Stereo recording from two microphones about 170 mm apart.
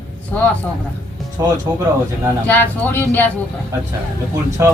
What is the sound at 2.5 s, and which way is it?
Speech, 10° left (ahead or behind).